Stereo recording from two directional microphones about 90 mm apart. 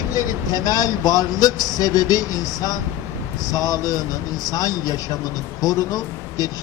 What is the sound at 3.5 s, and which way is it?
Speech, 45° left (ahead or behind).